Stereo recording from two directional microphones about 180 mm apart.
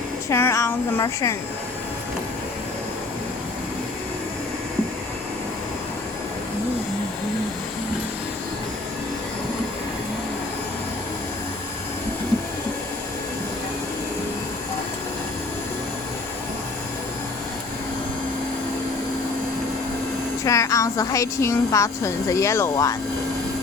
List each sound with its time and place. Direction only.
0.3 s speech: 15° left (ahead or behind)
20.4 s a woman's voice: 15° left (ahead or behind)